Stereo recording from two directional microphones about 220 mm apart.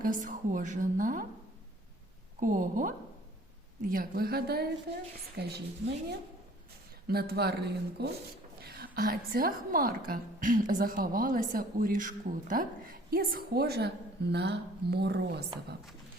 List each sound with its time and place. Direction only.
0.0 s a woman's voice: 35° right (ahead or behind)
2.4 s a woman's voice: 35° right (ahead or behind)
7.1 s a woman's voice: 45° right (ahead or behind)